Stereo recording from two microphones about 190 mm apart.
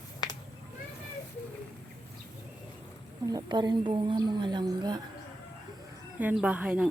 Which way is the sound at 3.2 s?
20° right (ahead or behind).